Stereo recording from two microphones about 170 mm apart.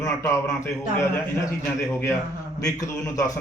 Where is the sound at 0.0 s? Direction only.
15° left (ahead or behind).